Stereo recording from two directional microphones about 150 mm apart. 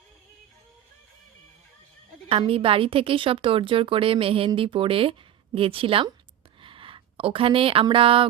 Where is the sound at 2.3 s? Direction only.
40° right (ahead or behind).